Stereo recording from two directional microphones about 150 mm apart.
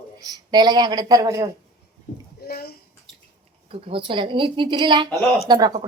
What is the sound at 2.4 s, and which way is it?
Speech, 90° left.